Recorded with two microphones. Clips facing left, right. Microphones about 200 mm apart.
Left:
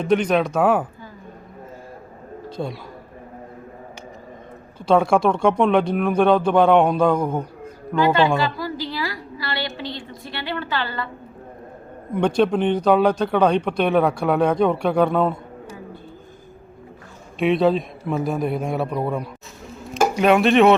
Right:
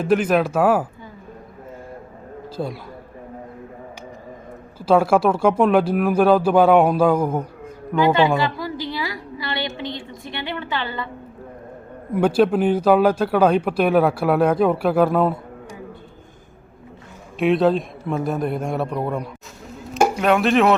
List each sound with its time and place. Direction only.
0.0 s speech: 5° right (ahead or behind)
2.6 s speech: centre (ahead or behind)
4.8 s speech: 5° right (ahead or behind)
8.0 s a woman's voice: 15° right (ahead or behind)
12.1 s speech: 5° right (ahead or behind)
17.3 s speech: centre (ahead or behind)